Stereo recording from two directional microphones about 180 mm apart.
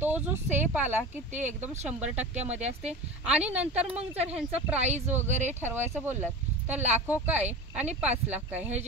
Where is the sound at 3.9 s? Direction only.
35° right (ahead or behind).